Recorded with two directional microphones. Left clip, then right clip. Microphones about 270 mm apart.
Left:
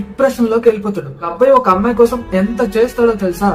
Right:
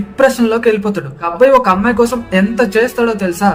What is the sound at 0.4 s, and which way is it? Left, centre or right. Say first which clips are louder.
Speech: even; right.